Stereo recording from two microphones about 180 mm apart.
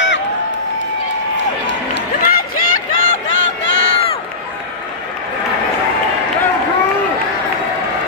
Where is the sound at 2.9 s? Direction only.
90° left.